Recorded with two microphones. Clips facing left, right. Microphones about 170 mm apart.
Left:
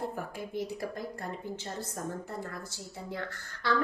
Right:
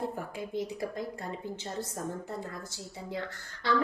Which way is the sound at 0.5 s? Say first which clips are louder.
Right 1 dB; 20° right (ahead or behind).